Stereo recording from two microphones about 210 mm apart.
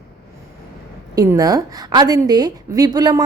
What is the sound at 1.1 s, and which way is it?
A woman's voice, 15° right (ahead or behind).